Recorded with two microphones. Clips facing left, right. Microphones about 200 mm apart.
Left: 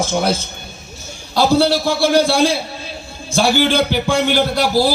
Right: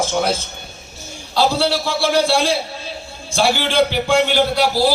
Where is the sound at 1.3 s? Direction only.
45° left (ahead or behind).